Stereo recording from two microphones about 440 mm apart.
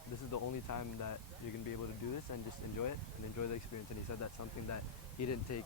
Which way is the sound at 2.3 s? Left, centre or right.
Left.